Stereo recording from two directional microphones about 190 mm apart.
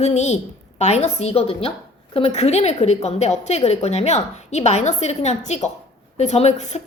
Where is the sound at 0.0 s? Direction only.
35° left (ahead or behind).